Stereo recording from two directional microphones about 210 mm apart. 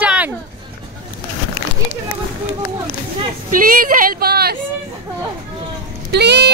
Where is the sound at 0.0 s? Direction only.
5° right (ahead or behind).